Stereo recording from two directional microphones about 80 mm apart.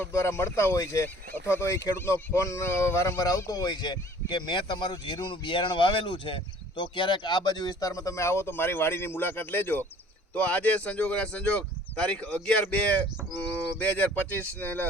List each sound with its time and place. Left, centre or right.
0.1 s speech: left